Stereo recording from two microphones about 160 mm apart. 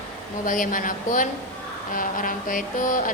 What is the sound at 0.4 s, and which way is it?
Mantra, 55° left (ahead or behind).